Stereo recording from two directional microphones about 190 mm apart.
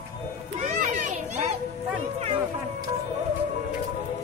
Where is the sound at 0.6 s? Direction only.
40° right (ahead or behind).